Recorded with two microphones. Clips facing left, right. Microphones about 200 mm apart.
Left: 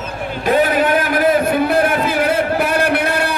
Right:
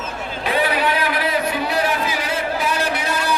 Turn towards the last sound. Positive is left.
turn(degrees=60)  # may be behind; listen again after turning